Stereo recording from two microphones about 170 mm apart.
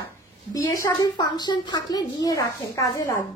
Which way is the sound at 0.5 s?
20° left (ahead or behind).